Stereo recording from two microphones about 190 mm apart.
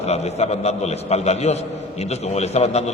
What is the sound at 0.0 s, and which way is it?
A man's voice, 35° left (ahead or behind).